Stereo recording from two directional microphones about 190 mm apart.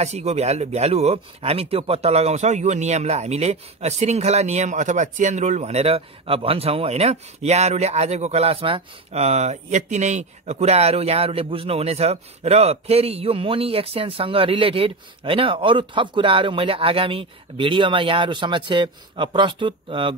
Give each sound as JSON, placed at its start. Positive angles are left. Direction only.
{"t": 0.0, "sound": "speech", "side_deg": -35}